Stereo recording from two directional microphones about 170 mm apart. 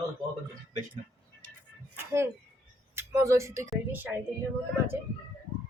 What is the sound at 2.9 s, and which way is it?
A woman's voice, 15° right (ahead or behind).